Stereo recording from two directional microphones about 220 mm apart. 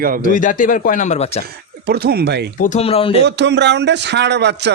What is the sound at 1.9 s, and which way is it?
Speech, 45° right (ahead or behind).